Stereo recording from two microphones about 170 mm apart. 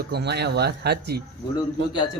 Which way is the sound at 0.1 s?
80° right.